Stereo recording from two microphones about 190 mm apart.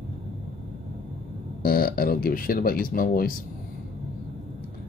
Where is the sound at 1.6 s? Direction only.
50° left (ahead or behind).